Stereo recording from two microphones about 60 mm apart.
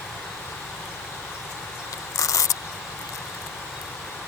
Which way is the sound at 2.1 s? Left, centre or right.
Left.